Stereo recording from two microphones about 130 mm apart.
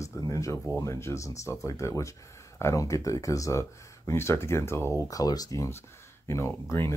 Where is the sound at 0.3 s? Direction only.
25° left (ahead or behind).